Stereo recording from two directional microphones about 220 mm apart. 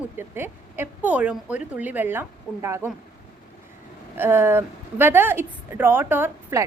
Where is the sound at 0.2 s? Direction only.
10° right (ahead or behind).